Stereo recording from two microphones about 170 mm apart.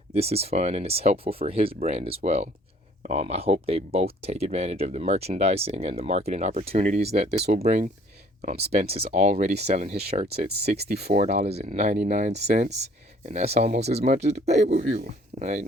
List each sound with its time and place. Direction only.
0.1 s speech: 35° right (ahead or behind)